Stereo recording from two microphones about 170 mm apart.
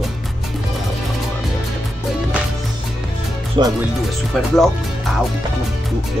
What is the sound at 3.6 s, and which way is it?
Speech, 30° right (ahead or behind).